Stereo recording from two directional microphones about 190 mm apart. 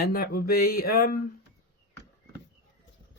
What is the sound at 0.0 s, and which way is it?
Speech, 50° left (ahead or behind).